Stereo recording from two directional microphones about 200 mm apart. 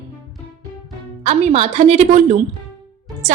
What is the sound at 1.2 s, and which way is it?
Speech, 35° right (ahead or behind).